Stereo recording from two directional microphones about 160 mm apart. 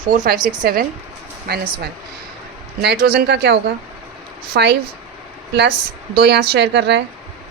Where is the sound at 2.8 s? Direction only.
85° right.